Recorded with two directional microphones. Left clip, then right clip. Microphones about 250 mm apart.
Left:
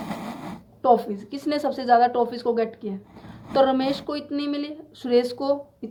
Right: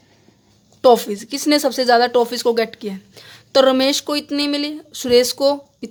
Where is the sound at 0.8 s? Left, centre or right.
Right.